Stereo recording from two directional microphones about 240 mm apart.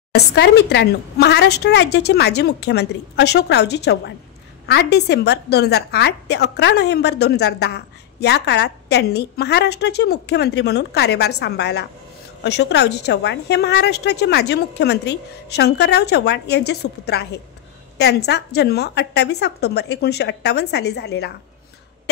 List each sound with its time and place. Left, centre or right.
0.1 s a woman's voice: left